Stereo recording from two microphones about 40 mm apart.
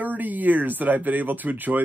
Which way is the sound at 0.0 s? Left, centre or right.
Right.